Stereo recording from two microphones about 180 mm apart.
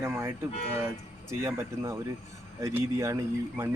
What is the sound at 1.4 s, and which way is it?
Speech, 15° right (ahead or behind).